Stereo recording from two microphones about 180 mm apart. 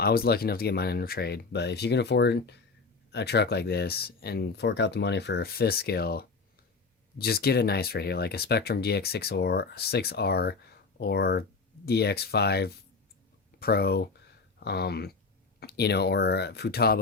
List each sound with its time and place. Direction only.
0.0 s speech: 60° left (ahead or behind)